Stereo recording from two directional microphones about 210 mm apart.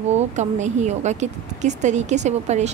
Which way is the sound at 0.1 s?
35° right (ahead or behind).